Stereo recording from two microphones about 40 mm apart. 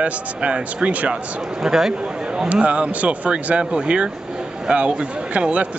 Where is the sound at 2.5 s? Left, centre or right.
Right.